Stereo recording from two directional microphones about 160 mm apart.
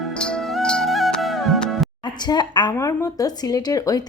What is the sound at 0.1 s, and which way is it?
Music, 5° left (ahead or behind).